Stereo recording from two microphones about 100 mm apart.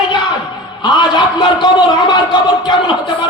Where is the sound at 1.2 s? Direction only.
50° left (ahead or behind).